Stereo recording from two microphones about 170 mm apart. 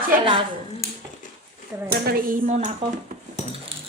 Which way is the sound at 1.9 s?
65° right (ahead or behind).